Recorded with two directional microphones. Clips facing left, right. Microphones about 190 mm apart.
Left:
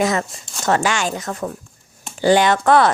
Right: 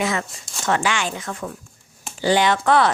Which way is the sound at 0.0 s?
40° left (ahead or behind).